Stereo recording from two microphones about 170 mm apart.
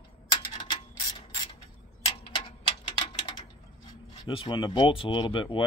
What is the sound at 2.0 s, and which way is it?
Tick-tock, 35° left (ahead or behind).